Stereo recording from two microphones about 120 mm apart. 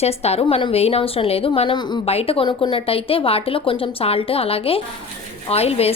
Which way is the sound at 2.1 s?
55° left (ahead or behind).